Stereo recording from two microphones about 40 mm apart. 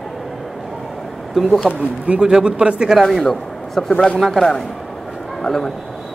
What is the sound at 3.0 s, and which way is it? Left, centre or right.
A man's voice, centre.